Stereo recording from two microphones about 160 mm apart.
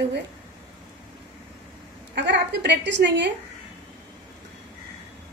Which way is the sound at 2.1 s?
90° right.